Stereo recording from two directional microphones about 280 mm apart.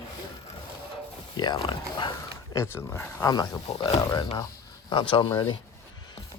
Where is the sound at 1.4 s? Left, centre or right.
Centre.